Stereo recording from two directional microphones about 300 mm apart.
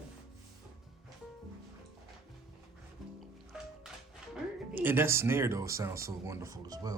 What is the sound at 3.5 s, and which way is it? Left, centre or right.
Music, centre.